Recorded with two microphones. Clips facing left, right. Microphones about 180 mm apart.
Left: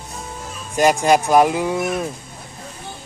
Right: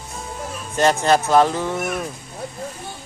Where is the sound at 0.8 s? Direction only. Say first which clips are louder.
Left 2 dB; 10° left (ahead or behind).